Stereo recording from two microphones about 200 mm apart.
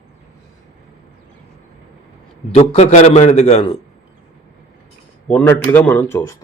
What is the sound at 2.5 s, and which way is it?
A man's voice, 30° left (ahead or behind).